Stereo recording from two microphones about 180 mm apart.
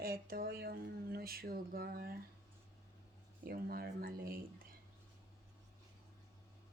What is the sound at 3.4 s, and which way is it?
Speech, 55° right (ahead or behind).